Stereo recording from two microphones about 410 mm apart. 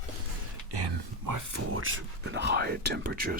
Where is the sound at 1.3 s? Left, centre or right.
Right.